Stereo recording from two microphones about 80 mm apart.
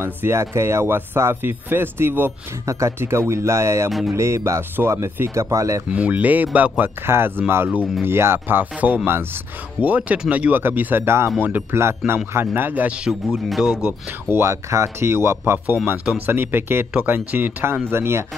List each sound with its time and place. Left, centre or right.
0.0 s speech: right
2.6 s speech: right
5.9 s speech: centre
12.0 s speech: centre
12.4 s speech: right
13.3 s speech: centre
14.3 s speech: right